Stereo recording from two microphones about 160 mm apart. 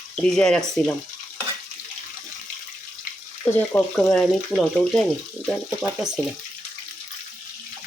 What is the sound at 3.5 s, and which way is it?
Speech, 10° left (ahead or behind).